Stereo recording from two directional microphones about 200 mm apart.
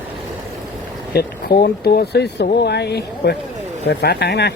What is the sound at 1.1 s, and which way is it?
Speech, 50° left (ahead or behind).